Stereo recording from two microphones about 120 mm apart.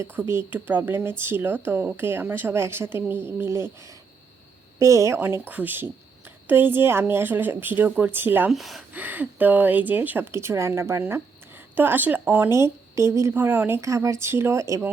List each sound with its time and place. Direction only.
0.0 s a woman's voice: 20° right (ahead or behind)
4.8 s a woman's voice: 25° right (ahead or behind)
8.4 s speech: centre (ahead or behind)
8.9 s a woman's voice: 15° right (ahead or behind)